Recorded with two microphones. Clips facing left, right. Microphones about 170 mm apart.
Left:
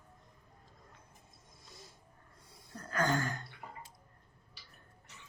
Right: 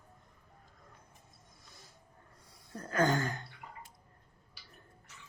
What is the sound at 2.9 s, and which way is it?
Speech, 20° right (ahead or behind).